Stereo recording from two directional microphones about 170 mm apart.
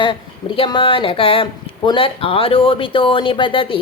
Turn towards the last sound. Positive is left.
turn(degrees=30)  # may be behind; listen again after turning